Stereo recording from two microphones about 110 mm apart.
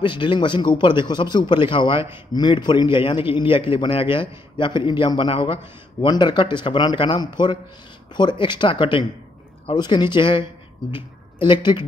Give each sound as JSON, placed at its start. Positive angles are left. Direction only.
{"t": 0.0, "sound": "a man's voice", "side_deg": 50}